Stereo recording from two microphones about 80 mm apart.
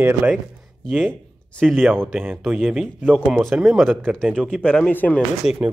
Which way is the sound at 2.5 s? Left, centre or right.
Centre.